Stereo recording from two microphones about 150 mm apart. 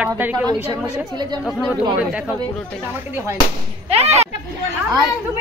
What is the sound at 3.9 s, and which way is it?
Speech, 45° right (ahead or behind).